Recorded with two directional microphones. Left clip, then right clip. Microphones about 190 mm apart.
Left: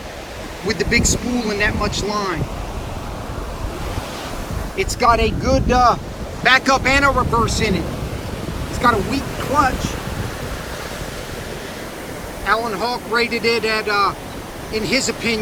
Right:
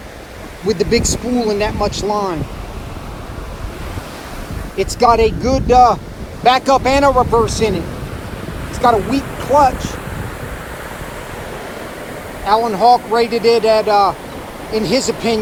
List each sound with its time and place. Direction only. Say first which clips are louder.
0.7 s speech: right 3 dB; 20° right (ahead or behind)
4.8 s speech: right 4 dB; 25° right (ahead or behind)
8.8 s speech: right 4 dB; 15° right (ahead or behind)
12.5 s speech: right 8 dB; 15° right (ahead or behind)